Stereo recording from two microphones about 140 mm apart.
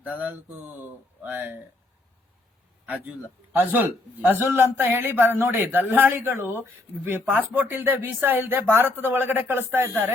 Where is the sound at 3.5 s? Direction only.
15° right (ahead or behind).